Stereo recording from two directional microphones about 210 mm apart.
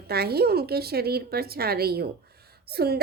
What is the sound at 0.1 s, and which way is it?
A woman's voice, 50° right (ahead or behind).